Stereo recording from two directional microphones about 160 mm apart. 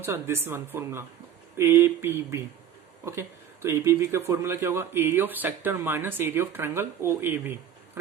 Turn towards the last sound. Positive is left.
turn(degrees=-15)  # may be behind; listen again after turning